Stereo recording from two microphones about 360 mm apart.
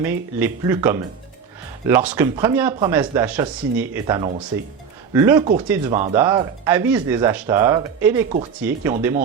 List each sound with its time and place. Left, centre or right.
0.0 s speech: centre
5.9 s speech: centre